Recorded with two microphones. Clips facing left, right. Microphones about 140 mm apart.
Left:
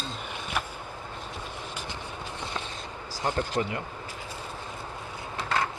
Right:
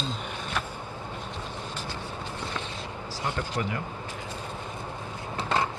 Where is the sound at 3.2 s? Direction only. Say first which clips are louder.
Left 3 dB; 35° left (ahead or behind).